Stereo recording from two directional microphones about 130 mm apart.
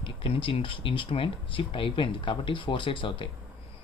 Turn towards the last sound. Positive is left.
turn(degrees=40)  # may be behind; listen again after turning